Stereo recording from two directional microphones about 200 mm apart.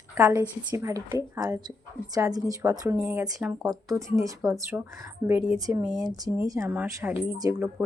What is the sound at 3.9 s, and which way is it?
Speech, 15° right (ahead or behind).